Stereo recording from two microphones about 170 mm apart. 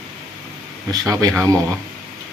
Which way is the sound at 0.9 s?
20° right (ahead or behind).